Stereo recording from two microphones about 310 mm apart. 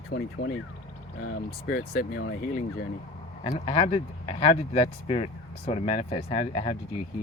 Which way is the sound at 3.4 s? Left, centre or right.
Centre.